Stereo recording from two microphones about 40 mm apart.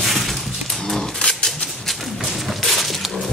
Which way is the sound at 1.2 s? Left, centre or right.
Left.